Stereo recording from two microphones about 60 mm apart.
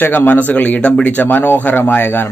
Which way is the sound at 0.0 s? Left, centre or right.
Left.